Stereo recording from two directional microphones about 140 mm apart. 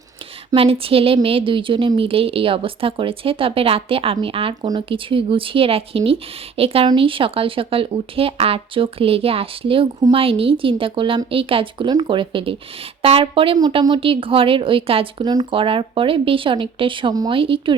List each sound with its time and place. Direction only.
0.5 s a woman's voice: 40° right (ahead or behind)
15.2 s a woman's voice: 30° right (ahead or behind)